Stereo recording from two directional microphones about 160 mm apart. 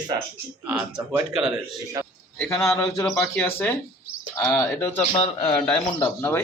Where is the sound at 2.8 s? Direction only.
5° left (ahead or behind).